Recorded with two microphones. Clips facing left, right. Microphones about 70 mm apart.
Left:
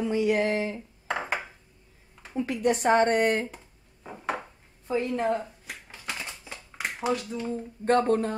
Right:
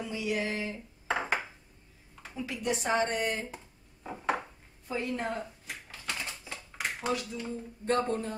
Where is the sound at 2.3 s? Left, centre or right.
Left.